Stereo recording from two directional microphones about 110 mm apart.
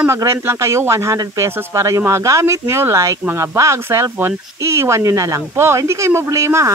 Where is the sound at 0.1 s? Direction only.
25° right (ahead or behind).